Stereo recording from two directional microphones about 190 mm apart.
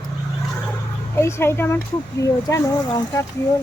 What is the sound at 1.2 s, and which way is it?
Speech, 15° left (ahead or behind).